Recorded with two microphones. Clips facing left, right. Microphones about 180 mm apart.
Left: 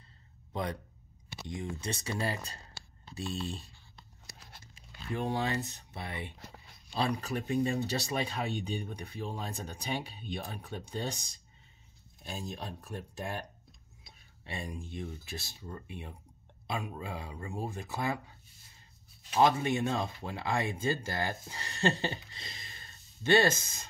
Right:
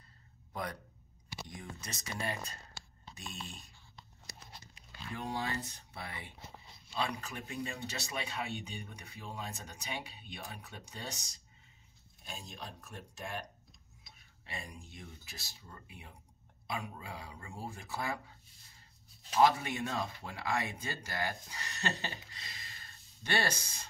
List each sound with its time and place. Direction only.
0.5 s speech: 25° left (ahead or behind)
5.1 s speech: 25° left (ahead or behind)
6.4 s a sound: 65° left (ahead or behind)
6.9 s speech: 35° left (ahead or behind)
19.3 s speech: 25° left (ahead or behind)